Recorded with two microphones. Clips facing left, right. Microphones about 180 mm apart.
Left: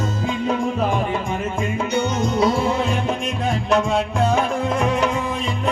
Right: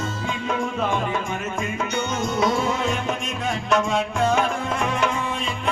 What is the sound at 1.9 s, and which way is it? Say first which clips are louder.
Music: left 5 dB; 30° left (ahead or behind).